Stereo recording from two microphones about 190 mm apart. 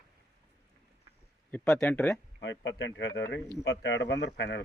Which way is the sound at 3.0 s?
15° left (ahead or behind).